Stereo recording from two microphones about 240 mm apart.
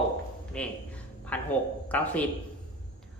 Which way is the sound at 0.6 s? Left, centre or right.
Centre.